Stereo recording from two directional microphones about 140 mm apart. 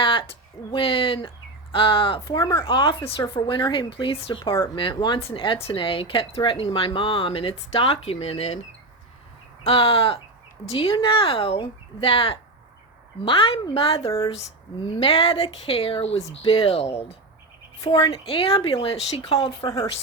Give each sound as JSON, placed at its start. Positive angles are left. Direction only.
{"t": 0.0, "sound": "speech", "side_deg": 40}
{"t": 4.5, "sound": "speech", "side_deg": 20}
{"t": 4.8, "sound": "speech", "side_deg": 35}
{"t": 9.6, "sound": "speech", "side_deg": 40}
{"t": 19.6, "sound": "speech", "side_deg": 20}